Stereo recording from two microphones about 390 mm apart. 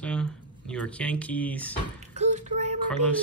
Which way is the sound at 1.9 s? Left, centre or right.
Centre.